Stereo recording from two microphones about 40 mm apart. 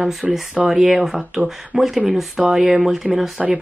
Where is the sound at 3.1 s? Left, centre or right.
Centre.